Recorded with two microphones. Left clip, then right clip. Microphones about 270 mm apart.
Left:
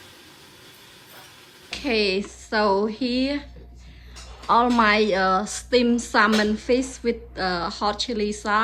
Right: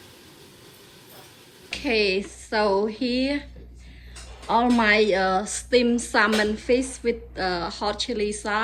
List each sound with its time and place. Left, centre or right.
1.7 s a woman's voice: centre
4.4 s a woman's voice: centre